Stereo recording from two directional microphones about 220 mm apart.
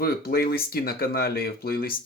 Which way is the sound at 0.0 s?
45° left (ahead or behind).